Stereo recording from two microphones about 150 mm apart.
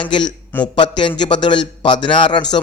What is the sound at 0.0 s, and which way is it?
A man's voice, 30° left (ahead or behind).